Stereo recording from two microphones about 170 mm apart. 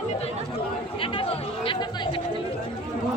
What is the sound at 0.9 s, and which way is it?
Speech, 30° left (ahead or behind).